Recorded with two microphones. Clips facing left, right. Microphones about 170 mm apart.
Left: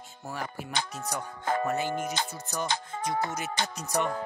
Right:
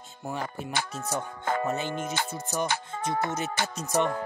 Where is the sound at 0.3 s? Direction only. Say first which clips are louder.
Right 3 dB; 20° right (ahead or behind).